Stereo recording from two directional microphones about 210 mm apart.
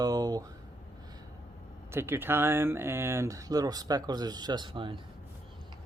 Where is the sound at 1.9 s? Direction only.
10° right (ahead or behind).